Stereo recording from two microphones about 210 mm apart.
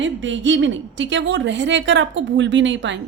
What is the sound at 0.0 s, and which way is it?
A woman's voice, 60° right (ahead or behind).